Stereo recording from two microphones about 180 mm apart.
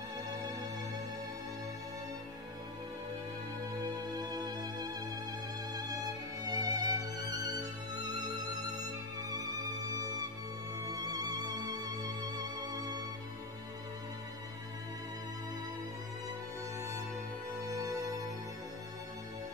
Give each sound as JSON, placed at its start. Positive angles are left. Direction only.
{"t": 0.3, "sound": "music", "side_deg": -20}
{"t": 3.8, "sound": "music", "side_deg": -20}
{"t": 10.9, "sound": "music", "side_deg": -20}